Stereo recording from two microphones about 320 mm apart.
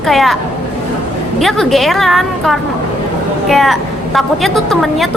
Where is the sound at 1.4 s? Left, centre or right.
Centre.